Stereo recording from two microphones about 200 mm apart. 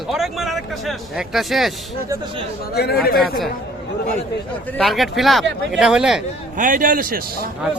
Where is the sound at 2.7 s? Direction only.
55° left (ahead or behind).